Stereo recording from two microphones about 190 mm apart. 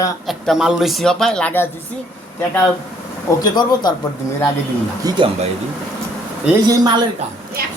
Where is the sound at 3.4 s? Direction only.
20° left (ahead or behind).